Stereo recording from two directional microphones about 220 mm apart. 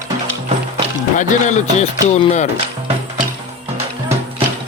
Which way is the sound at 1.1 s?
35° left (ahead or behind).